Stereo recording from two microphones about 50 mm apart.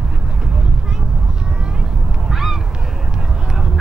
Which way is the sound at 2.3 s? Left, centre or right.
Centre.